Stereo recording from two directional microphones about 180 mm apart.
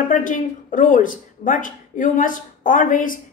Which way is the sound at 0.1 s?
45° left (ahead or behind).